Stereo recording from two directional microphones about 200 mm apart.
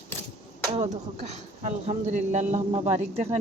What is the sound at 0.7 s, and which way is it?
Speech, 35° right (ahead or behind).